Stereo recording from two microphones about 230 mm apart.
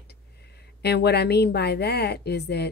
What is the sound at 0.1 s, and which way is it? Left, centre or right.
A woman's voice, left.